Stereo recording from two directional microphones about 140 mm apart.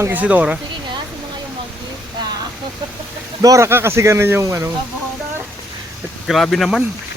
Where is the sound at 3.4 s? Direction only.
25° right (ahead or behind).